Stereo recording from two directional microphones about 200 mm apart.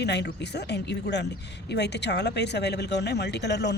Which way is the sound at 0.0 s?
60° left (ahead or behind).